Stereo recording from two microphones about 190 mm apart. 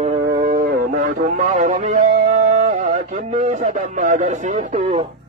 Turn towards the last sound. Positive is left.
turn(degrees=-35)  # may be behind; listen again after turning